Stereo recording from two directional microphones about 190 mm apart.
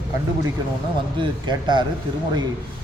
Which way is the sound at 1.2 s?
25° right (ahead or behind).